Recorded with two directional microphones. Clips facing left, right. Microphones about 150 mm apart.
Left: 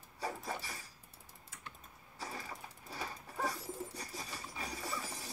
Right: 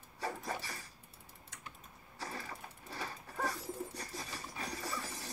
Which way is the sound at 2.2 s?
Centre (ahead or behind).